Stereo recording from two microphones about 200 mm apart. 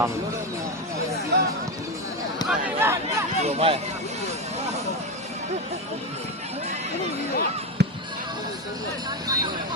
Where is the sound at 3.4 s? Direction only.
30° right (ahead or behind).